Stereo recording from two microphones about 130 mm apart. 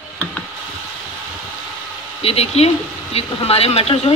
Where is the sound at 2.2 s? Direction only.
50° left (ahead or behind).